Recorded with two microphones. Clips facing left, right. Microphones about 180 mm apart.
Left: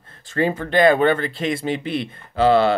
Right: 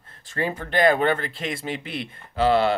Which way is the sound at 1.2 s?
25° left (ahead or behind).